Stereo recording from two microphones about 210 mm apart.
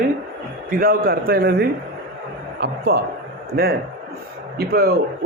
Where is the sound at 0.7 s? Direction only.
45° right (ahead or behind).